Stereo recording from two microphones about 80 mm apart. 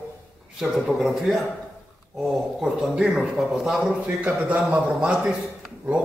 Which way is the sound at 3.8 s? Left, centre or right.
Centre.